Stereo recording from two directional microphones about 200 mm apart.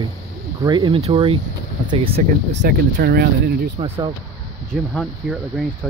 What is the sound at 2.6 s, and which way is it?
Speech, 50° right (ahead or behind).